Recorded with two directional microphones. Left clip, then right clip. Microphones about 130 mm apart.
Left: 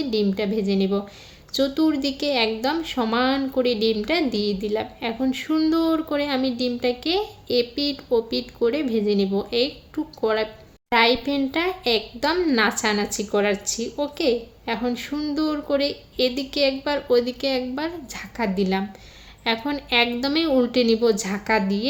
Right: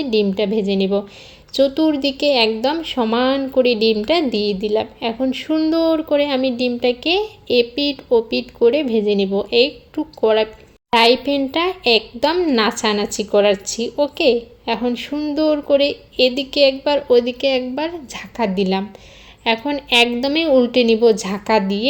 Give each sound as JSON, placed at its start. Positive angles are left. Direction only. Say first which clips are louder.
{"t": 0.0, "sound": "a woman's voice", "louder": "right 6 dB", "side_deg": -25}